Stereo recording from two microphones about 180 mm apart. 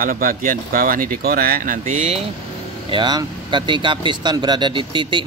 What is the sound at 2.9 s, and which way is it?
Speech, 25° right (ahead or behind).